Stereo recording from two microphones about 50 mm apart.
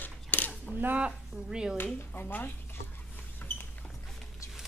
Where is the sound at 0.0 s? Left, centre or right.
Left.